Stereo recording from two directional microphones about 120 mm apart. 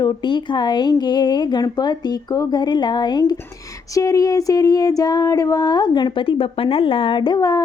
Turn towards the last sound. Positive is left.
turn(degrees=30)  # may be behind; listen again after turning